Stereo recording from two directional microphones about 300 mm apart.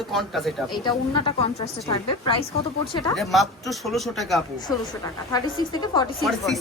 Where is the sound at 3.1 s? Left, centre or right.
Centre.